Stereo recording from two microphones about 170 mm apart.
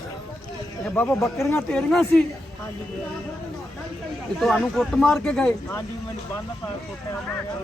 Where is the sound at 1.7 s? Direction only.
5° left (ahead or behind).